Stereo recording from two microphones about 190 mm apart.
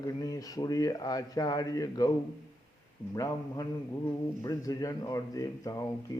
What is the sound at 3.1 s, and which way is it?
Speech, 20° left (ahead or behind).